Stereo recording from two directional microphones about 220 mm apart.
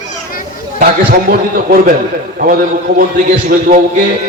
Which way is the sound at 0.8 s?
40° right (ahead or behind).